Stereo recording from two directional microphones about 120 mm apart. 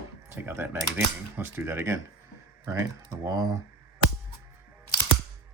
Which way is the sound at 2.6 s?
30° right (ahead or behind).